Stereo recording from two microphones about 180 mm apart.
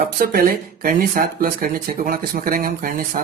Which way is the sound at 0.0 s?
55° right (ahead or behind).